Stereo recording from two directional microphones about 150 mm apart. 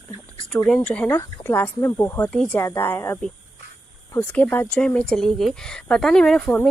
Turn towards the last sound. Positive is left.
turn(degrees=5)  # may be behind; listen again after turning